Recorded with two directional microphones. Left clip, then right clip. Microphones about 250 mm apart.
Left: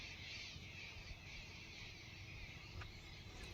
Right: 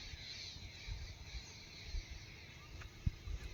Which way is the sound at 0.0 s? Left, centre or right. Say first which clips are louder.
Right 1 dB; left.